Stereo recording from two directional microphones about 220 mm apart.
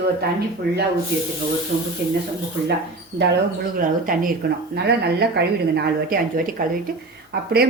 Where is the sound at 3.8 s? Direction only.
40° right (ahead or behind).